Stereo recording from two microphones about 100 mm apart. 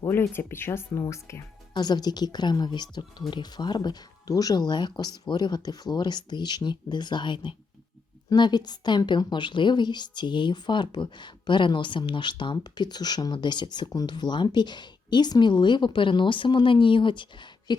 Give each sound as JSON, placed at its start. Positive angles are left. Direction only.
{"t": 0.1, "sound": "speech", "side_deg": 20}
{"t": 1.7, "sound": "a woman's voice", "side_deg": 45}